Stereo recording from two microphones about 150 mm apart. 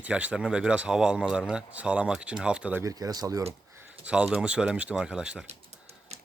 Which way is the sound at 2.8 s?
25° right (ahead or behind).